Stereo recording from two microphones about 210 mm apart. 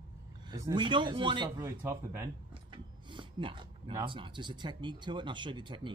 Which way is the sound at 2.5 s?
25° right (ahead or behind).